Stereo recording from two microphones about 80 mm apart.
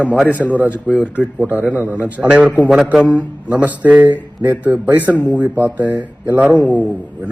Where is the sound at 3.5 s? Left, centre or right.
Centre.